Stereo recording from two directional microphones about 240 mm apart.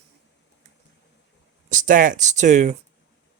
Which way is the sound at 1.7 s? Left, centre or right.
Right.